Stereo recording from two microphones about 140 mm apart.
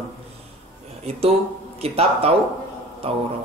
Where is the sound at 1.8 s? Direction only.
45° right (ahead or behind).